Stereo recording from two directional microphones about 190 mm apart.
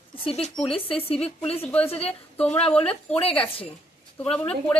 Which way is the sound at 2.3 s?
5° left (ahead or behind).